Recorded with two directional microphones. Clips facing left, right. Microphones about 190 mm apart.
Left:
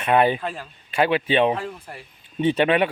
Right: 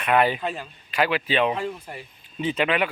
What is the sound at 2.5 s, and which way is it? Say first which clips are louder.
Speech: left 4 dB; 30° left (ahead or behind).